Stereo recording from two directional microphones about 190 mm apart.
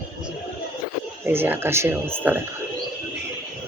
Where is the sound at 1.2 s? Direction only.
10° right (ahead or behind).